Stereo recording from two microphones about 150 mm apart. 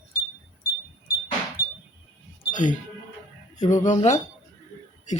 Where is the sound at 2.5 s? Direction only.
60° left (ahead or behind).